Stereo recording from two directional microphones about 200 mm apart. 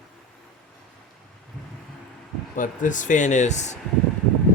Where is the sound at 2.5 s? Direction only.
40° left (ahead or behind).